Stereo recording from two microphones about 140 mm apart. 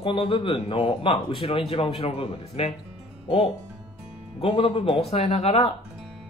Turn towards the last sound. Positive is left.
turn(degrees=45)  # may be behind; listen again after turning